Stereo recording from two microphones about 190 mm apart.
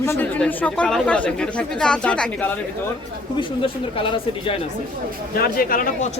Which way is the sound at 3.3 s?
25° left (ahead or behind).